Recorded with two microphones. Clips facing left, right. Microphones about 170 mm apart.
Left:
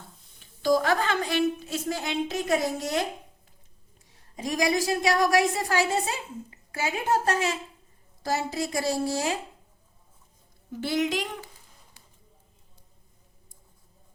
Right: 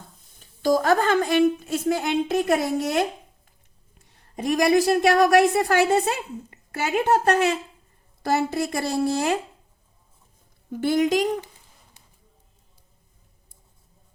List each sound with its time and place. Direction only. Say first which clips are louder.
0.3 s a woman's voice: right 2 dB; 45° right (ahead or behind)
10.7 s a woman's voice: right 6 dB; 50° right (ahead or behind)